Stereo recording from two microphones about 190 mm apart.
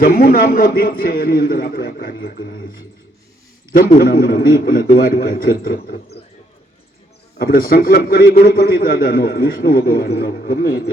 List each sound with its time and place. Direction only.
0.0 s a man's voice: 50° left (ahead or behind)
3.7 s a man's voice: 50° left (ahead or behind)
7.3 s a man's voice: 50° left (ahead or behind)